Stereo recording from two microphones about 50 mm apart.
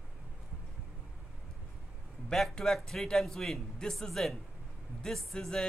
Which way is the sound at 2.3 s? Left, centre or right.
Centre.